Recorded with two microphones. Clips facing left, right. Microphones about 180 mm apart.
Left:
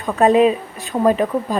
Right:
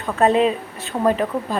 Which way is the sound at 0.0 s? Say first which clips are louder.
Left 3 dB; 15° left (ahead or behind).